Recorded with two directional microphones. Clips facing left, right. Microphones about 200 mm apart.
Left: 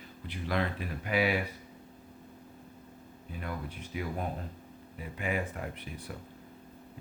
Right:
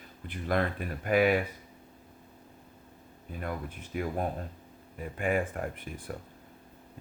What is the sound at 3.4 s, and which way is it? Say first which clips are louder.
Speech: right 3 dB; 50° right (ahead or behind).